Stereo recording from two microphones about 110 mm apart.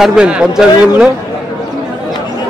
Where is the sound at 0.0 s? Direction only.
5° right (ahead or behind).